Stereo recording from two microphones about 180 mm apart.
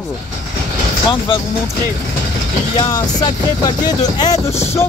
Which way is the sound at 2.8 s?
20° left (ahead or behind).